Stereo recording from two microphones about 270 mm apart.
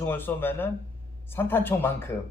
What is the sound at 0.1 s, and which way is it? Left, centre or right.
Speech, centre.